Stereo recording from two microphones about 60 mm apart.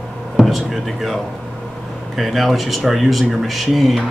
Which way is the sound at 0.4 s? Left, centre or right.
Centre.